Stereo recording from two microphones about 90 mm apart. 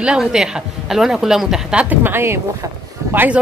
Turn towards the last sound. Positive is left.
turn(degrees=-20)  # may be behind; listen again after turning